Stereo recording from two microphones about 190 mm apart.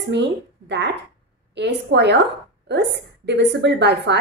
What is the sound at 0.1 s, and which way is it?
A woman's voice, 65° right (ahead or behind).